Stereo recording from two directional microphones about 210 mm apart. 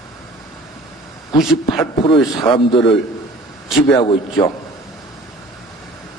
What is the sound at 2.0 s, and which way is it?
Speech, 25° left (ahead or behind).